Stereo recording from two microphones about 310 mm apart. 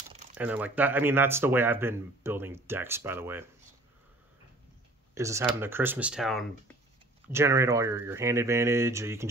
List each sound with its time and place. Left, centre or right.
0.1 s a sound: right
0.4 s speech: centre
5.1 s speech: centre